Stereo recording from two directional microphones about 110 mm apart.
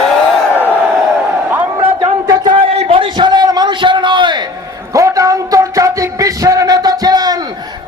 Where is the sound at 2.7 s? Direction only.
55° right (ahead or behind).